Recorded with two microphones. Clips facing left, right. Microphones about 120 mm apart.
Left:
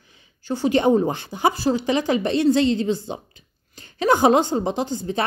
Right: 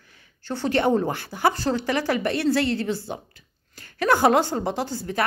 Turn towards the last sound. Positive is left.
turn(degrees=20)  # may be behind; listen again after turning